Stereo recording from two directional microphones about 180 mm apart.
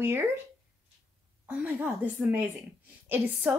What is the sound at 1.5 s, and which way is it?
Speech, 10° right (ahead or behind).